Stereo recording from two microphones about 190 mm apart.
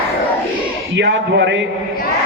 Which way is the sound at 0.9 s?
70° right (ahead or behind).